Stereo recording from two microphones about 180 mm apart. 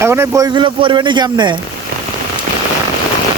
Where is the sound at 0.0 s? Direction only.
15° right (ahead or behind).